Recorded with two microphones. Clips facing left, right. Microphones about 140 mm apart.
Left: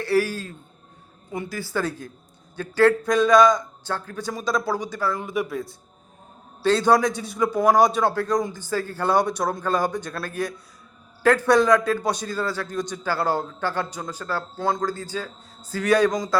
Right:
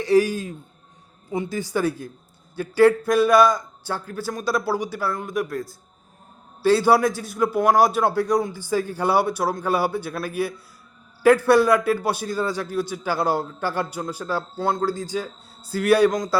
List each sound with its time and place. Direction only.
0.0 s a man's voice: 15° right (ahead or behind)